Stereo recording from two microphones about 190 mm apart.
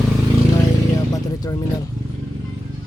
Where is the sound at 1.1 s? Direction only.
20° left (ahead or behind).